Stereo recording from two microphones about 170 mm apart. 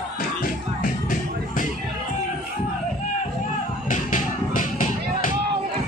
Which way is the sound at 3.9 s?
50° left (ahead or behind).